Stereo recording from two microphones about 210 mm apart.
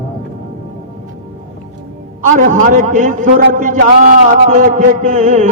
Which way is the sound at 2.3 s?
40° right (ahead or behind).